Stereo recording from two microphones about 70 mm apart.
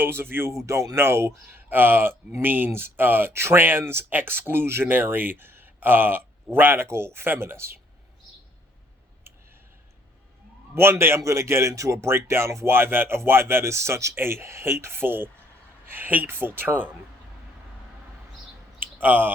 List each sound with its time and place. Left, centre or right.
0.0 s speech: right
0.6 s speech: right
10.8 s speech: right
12.7 s speech: right
18.9 s speech: right